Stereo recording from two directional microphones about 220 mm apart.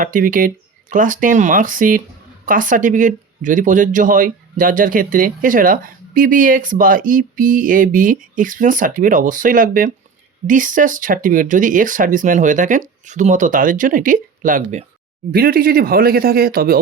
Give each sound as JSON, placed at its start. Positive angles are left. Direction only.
{"t": 0.0, "sound": "speech", "side_deg": -35}